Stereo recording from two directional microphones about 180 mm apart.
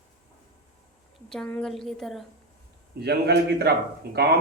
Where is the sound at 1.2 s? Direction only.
5° left (ahead or behind).